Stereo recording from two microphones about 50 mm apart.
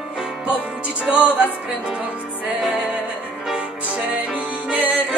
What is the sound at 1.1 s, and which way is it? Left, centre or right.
Music, right.